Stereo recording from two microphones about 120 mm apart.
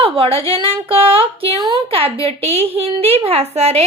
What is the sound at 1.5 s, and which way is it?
A woman's voice, 40° right (ahead or behind).